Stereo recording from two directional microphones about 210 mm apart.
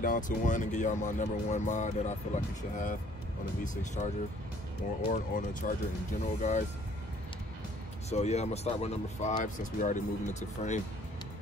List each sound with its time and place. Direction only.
0.0 s speech: 40° left (ahead or behind)
8.1 s speech: 30° left (ahead or behind)